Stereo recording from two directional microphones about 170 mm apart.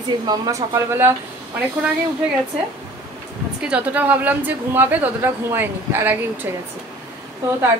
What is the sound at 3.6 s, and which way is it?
A woman's voice, 10° right (ahead or behind).